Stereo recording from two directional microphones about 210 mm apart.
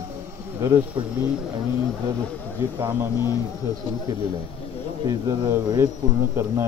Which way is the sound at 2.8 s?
10° right (ahead or behind).